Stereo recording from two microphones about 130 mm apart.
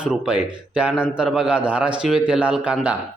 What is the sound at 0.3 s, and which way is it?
A man's voice, 10° right (ahead or behind).